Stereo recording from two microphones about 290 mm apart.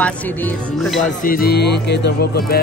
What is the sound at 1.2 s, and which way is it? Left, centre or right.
Speech, left.